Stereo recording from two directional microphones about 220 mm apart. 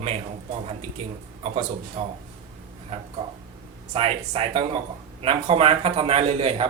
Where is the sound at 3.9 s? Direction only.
30° right (ahead or behind).